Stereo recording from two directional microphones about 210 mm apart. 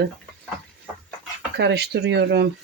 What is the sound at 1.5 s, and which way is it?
Speech, 50° right (ahead or behind).